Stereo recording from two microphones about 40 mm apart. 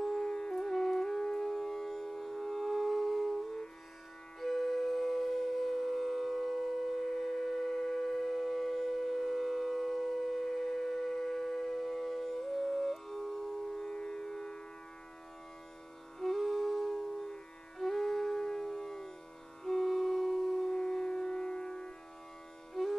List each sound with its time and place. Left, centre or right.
0.0 s music: centre
4.4 s siren: centre
13.8 s music: centre
16.2 s music: centre
20.7 s siren: centre
22.8 s music: centre